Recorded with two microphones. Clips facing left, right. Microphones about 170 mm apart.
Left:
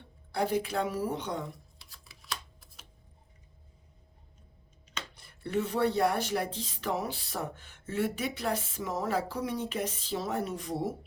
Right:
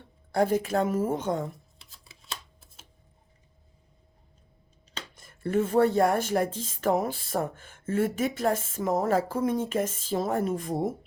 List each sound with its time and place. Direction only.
0.3 s speech: 45° right (ahead or behind)
2.0 s a sound: 25° right (ahead or behind)
5.1 s speech: 50° right (ahead or behind)